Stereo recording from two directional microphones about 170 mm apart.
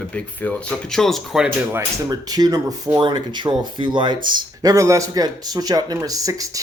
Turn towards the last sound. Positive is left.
turn(degrees=-20)  # may be behind; listen again after turning